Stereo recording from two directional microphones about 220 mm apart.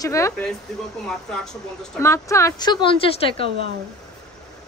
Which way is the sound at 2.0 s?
15° left (ahead or behind).